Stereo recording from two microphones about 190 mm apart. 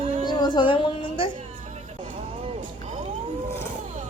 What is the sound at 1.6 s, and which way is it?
Vehicle, 35° right (ahead or behind).